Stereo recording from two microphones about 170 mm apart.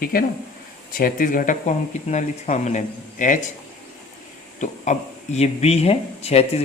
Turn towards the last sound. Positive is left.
turn(degrees=35)  # may be behind; listen again after turning